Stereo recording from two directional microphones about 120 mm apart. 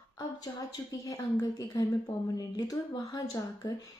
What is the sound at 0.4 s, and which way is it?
A woman's voice, 30° left (ahead or behind).